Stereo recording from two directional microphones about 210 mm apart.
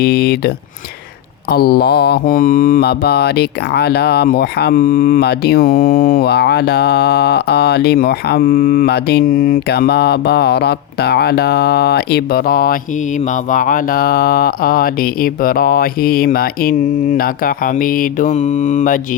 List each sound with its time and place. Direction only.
0.0 s mantra: 50° left (ahead or behind)